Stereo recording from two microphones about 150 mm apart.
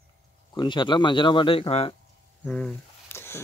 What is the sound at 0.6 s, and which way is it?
Speech, 30° left (ahead or behind).